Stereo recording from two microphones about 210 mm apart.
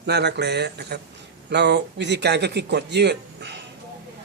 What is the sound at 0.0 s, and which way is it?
Speech, 55° right (ahead or behind).